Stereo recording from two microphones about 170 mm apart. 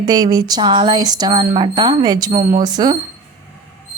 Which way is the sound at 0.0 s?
25° right (ahead or behind).